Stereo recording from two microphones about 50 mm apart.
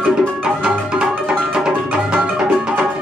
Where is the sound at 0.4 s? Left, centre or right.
Right.